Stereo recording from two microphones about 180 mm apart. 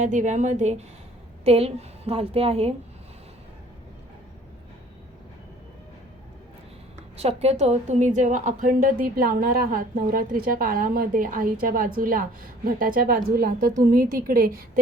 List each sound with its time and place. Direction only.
0.0 s a woman's voice: 45° right (ahead or behind)
7.2 s a woman's voice: 35° right (ahead or behind); by 14.6 s 55° right (ahead or behind)